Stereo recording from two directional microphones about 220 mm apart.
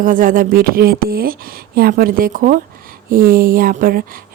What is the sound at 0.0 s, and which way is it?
Speech, 40° right (ahead or behind).